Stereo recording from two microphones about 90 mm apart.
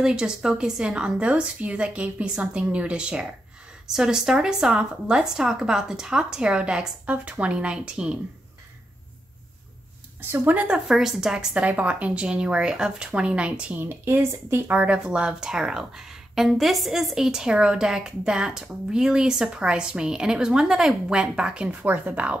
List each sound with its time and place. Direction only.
0.0 s speech: 10° right (ahead or behind)
10.5 s speech: 15° right (ahead or behind)
10.9 s speech: 5° right (ahead or behind); by 14.8 s 25° right (ahead or behind)
14.8 s speech: 15° right (ahead or behind)